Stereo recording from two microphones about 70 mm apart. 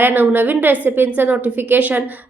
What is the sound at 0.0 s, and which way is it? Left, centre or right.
A woman's voice, right.